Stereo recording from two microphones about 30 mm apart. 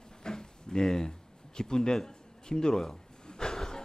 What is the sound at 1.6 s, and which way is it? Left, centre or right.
Speech, left.